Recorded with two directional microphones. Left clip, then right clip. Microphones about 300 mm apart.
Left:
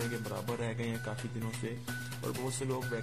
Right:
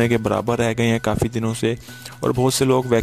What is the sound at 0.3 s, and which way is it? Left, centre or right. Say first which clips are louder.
Speech: right 18 dB; right.